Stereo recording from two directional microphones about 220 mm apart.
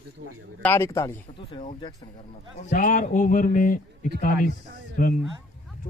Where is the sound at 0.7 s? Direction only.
15° left (ahead or behind).